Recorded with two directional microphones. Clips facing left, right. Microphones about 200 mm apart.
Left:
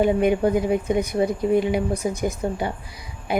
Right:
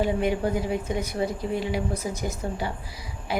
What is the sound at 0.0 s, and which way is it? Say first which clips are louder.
A woman's voice: left 6 dB; 15° left (ahead or behind).